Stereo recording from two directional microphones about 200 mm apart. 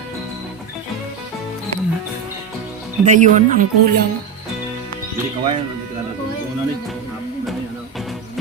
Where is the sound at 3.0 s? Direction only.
40° right (ahead or behind).